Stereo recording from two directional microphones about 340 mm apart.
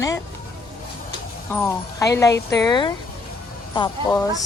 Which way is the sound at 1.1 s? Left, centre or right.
Centre.